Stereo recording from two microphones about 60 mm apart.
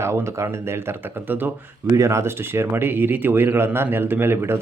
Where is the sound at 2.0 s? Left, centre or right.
Right.